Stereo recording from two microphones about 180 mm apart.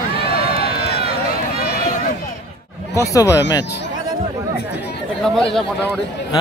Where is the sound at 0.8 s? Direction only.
60° left (ahead or behind).